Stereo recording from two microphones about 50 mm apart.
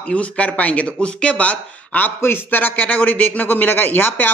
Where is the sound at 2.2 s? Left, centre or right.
Left.